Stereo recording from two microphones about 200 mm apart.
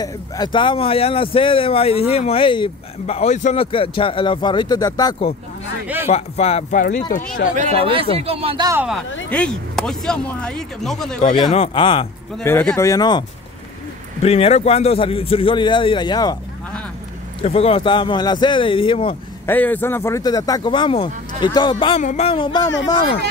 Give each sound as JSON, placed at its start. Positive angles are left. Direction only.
{"t": 0.0, "sound": "speech", "side_deg": 20}
{"t": 6.0, "sound": "speech", "side_deg": 30}
{"t": 7.5, "sound": "speech", "side_deg": -35}
{"t": 9.3, "sound": "speech", "side_deg": 5}
{"t": 11.3, "sound": "speech", "side_deg": 25}
{"t": 12.4, "sound": "speech", "side_deg": 5}
{"t": 14.2, "sound": "speech", "side_deg": 30}
{"t": 17.4, "sound": "speech", "side_deg": 30}
{"t": 19.4, "sound": "speech", "side_deg": 10}